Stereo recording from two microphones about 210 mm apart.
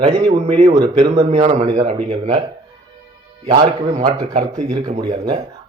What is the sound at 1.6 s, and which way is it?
Speech, 20° right (ahead or behind).